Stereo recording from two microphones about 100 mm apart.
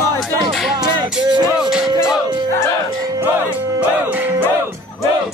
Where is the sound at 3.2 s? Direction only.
20° right (ahead or behind).